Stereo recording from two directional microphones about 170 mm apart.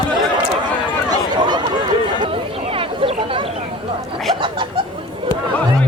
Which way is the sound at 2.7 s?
30° right (ahead or behind).